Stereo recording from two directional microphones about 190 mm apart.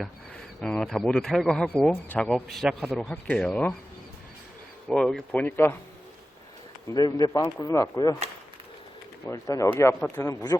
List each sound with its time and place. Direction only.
0.0 s speech: centre (ahead or behind)
4.9 s speech: 5° left (ahead or behind)
6.9 s speech: 20° left (ahead or behind)
9.2 s speech: 15° left (ahead or behind)